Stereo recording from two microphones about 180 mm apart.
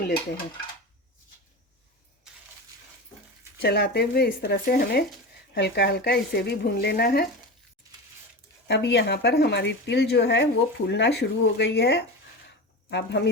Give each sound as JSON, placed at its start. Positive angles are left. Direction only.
{"t": 3.6, "sound": "speech", "side_deg": 65}
{"t": 8.6, "sound": "speech", "side_deg": 65}
{"t": 12.5, "sound": "a sound", "side_deg": 70}